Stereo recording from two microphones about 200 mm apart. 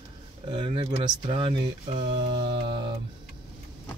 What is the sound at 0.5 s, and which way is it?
Speech, 25° right (ahead or behind).